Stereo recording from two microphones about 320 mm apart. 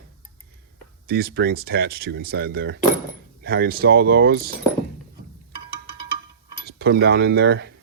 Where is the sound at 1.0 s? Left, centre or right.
Right.